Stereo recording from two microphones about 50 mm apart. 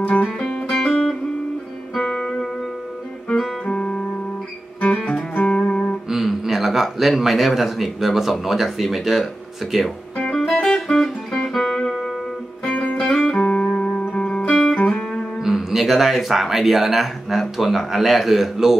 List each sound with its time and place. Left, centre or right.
0.0 s music: left
0.4 s music: centre
3.6 s music: left
6.0 s speech: centre
10.3 s music: centre
12.6 s music: left
13.0 s music: centre
13.5 s music: left
14.5 s music: centre
14.8 s music: left
15.4 s speech: centre